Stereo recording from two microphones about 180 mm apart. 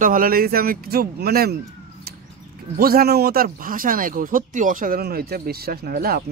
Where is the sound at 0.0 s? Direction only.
50° right (ahead or behind).